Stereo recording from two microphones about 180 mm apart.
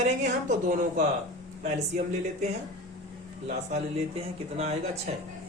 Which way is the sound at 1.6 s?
40° right (ahead or behind).